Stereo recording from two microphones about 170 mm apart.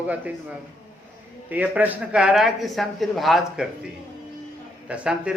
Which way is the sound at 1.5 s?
10° right (ahead or behind).